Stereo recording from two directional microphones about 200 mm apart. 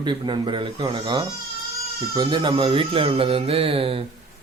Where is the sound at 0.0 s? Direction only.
25° right (ahead or behind).